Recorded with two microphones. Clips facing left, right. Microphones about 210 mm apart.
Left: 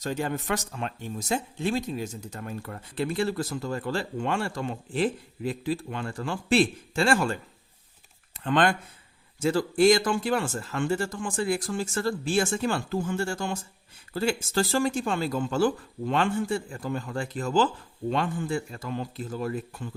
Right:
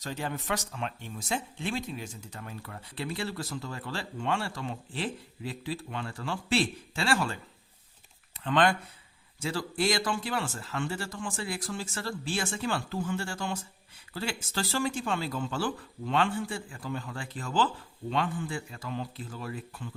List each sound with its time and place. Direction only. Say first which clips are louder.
0.0 s speech: left 6 dB; 45° left (ahead or behind)
8.4 s speech: left 2 dB; 45° left (ahead or behind)